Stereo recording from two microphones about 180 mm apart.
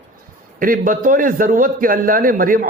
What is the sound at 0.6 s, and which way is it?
A man's voice, 50° right (ahead or behind).